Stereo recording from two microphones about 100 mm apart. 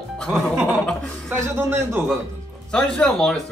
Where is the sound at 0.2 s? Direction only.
10° left (ahead or behind).